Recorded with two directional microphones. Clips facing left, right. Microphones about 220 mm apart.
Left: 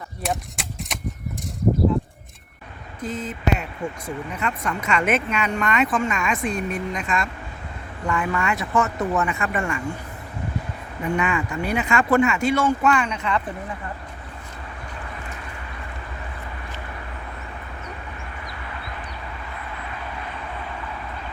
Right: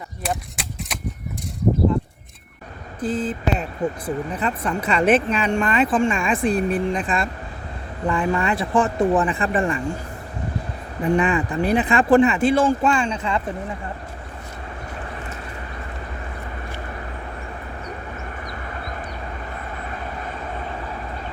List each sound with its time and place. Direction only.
0.3 s a sound: centre (ahead or behind)
3.0 s speech: 30° right (ahead or behind)
11.0 s speech: 30° right (ahead or behind)
18.5 s vehicle: 40° right (ahead or behind)